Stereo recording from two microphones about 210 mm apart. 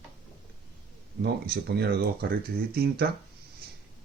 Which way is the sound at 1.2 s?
50° right (ahead or behind).